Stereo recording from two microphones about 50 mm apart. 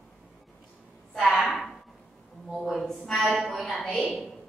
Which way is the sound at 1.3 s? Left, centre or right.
Centre.